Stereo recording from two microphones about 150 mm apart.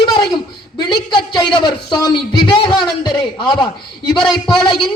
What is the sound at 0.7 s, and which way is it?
A man's voice, 35° left (ahead or behind).